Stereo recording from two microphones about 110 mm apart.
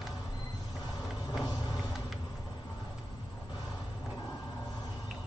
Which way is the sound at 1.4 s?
40° left (ahead or behind).